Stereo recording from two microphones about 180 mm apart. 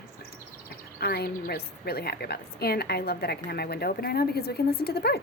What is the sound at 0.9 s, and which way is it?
A woman's voice, 60° left (ahead or behind).